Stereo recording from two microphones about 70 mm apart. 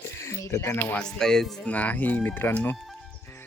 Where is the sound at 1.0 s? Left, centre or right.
Centre.